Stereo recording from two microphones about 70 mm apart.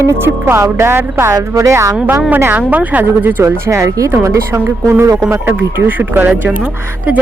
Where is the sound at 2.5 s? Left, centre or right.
Right.